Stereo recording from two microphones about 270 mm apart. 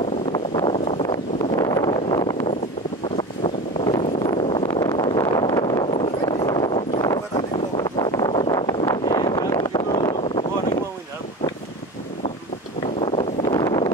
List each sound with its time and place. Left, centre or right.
0.3 s vehicle: centre
13.0 s vehicle: centre